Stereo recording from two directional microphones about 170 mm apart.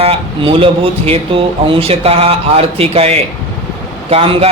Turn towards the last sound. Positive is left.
turn(degrees=-35)  # may be behind; listen again after turning